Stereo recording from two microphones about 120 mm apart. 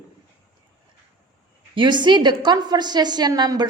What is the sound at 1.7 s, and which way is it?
A woman's voice, 40° right (ahead or behind).